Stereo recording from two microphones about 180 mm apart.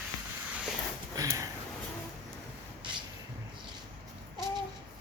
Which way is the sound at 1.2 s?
15° right (ahead or behind).